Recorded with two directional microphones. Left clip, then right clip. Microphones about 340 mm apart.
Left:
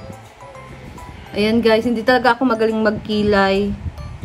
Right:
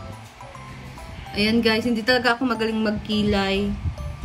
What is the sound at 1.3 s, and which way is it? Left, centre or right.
Speech, centre.